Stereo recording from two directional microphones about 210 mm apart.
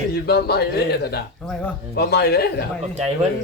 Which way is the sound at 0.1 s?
50° left (ahead or behind).